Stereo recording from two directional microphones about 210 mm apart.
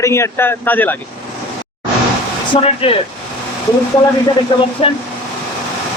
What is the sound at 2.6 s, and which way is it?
Speech, 25° left (ahead or behind).